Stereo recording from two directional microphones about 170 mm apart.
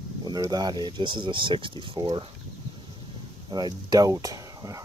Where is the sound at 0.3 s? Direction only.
20° right (ahead or behind).